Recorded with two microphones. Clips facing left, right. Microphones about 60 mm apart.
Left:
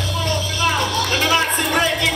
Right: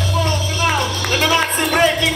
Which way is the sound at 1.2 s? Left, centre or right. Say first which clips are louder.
Right 3 dB; right.